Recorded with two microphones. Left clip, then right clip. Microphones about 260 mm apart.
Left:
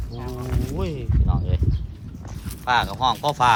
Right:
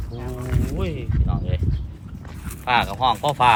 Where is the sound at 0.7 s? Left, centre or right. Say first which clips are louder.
Even; centre.